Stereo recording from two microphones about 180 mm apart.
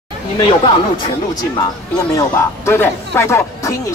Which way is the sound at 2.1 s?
15° left (ahead or behind).